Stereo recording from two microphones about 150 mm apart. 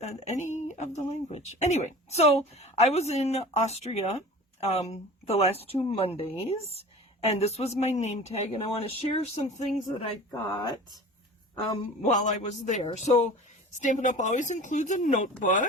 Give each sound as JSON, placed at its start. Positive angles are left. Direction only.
{"t": 0.0, "sound": "speech", "side_deg": 50}
{"t": 12.0, "sound": "speech", "side_deg": 50}
{"t": 13.7, "sound": "speech", "side_deg": 55}